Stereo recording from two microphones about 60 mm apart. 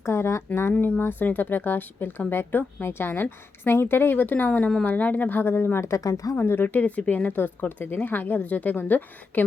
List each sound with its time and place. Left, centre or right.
0.0 s speech: left
0.8 s a woman's voice: left
5.9 s speech: left
6.3 s speech: left